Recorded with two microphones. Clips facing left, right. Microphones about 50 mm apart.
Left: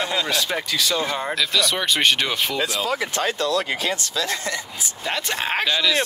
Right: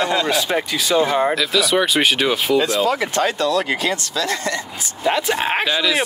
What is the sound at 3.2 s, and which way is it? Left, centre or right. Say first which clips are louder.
Speech: right 4 dB; right.